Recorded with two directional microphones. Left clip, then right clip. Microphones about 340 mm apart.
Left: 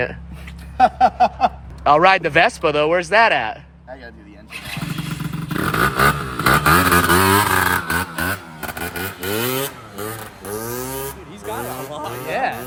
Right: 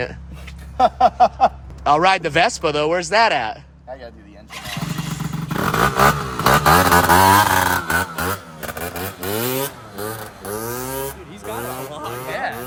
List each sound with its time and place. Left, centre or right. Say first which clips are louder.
0.8 s speech: even; centre
5.5 s vehicle: right 1 dB; centre
12.0 s a sound: left 4 dB; centre